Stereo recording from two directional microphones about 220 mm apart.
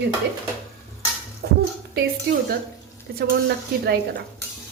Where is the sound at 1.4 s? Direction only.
50° right (ahead or behind).